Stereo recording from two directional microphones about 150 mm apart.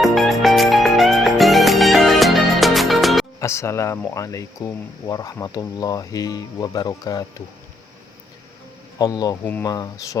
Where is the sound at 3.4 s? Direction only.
20° left (ahead or behind).